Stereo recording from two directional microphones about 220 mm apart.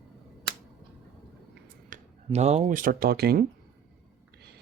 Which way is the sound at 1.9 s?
30° right (ahead or behind).